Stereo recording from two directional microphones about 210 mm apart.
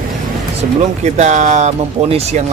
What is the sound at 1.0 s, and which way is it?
Speech, 35° right (ahead or behind).